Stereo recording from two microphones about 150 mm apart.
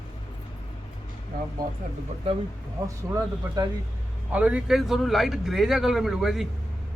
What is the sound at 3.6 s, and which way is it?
Speech, 25° right (ahead or behind).